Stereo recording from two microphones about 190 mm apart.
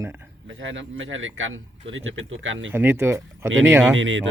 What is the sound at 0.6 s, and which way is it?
Speech, 85° right.